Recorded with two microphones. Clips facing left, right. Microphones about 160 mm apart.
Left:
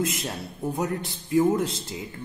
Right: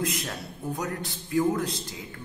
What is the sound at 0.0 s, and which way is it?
A man's voice, 25° left (ahead or behind).